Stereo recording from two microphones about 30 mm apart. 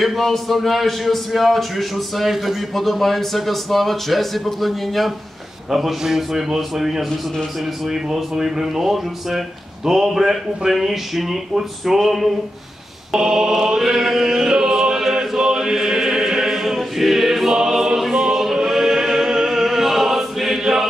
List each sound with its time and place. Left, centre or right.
0.0 s a man's voice: centre
5.7 s a sound: centre
7.8 s a man's voice: centre
8.4 s a sound: centre
13.1 s a sound: centre
14.5 s music: centre
15.1 s chant: right
18.3 s choir: centre
19.5 s music: centre
20.5 s choir: centre